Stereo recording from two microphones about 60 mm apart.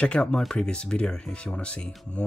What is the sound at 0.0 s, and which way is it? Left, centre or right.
Speech, centre.